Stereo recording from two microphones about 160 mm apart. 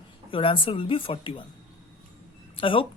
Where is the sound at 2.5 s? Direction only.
35° left (ahead or behind).